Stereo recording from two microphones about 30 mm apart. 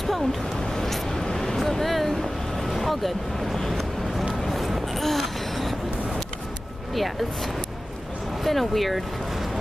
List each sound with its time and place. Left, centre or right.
0.0 s a sound: centre
0.7 s vehicle: centre
1.3 s a sound: centre
1.6 s vehicle: centre
4.4 s gasp: centre
8.5 s speech: centre